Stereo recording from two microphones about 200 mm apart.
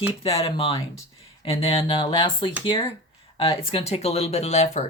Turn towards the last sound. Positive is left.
turn(degrees=35)  # may be behind; listen again after turning